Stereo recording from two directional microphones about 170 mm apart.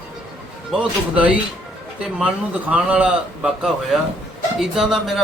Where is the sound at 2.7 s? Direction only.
10° right (ahead or behind).